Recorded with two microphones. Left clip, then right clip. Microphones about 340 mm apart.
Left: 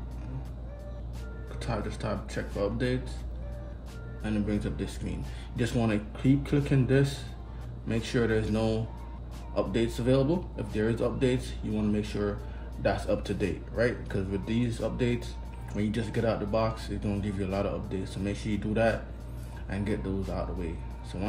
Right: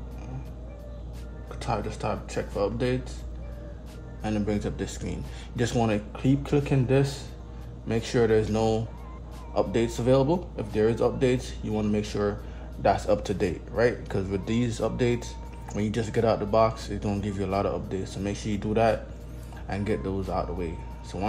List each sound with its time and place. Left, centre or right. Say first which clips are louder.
1.6 s speech: right 5 dB; centre
4.2 s speech: right 4 dB; centre